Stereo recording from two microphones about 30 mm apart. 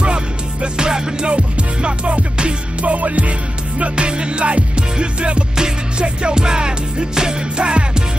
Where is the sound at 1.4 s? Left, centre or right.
Right.